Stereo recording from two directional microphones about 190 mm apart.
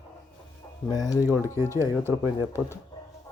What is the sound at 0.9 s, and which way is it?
Speech, 20° left (ahead or behind).